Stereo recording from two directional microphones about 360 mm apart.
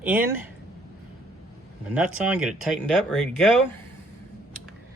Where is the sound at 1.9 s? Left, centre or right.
Centre.